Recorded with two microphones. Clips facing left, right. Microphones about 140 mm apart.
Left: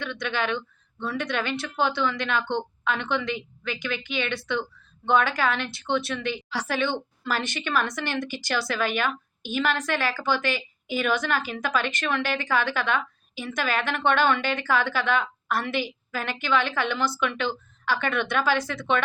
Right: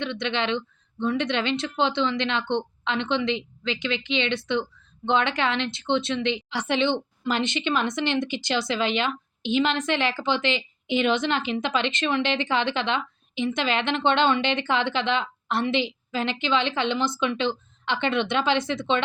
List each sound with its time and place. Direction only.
0.0 s a woman's voice: 25° right (ahead or behind)